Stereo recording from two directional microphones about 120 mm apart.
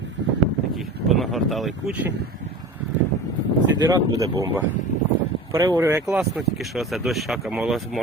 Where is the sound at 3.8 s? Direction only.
30° right (ahead or behind).